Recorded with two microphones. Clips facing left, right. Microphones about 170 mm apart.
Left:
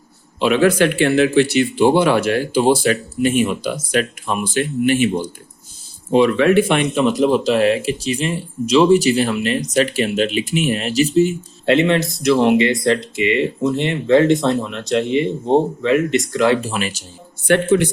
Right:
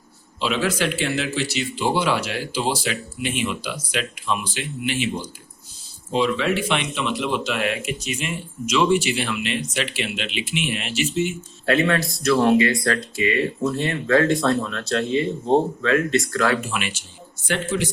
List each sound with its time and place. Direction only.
0.3 s speech: 55° left (ahead or behind); by 11.3 s 35° left (ahead or behind)
11.6 s speech: 25° left (ahead or behind)
16.6 s speech: 35° left (ahead or behind)
17.5 s speech: 60° left (ahead or behind)